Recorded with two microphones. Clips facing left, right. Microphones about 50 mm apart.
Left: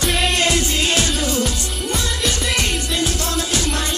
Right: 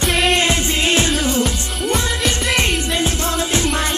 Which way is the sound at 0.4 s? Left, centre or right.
Right.